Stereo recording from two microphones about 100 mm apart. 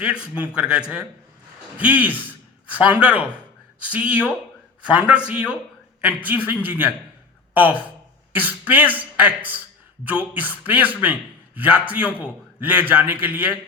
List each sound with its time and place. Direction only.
0.0 s a man's voice: 10° right (ahead or behind)